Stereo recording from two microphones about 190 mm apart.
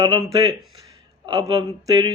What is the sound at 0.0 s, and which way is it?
A man's voice, 20° right (ahead or behind).